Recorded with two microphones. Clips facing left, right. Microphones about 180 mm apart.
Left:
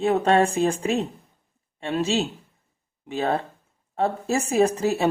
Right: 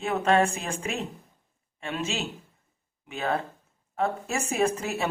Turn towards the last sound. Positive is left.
turn(degrees=35)  # may be behind; listen again after turning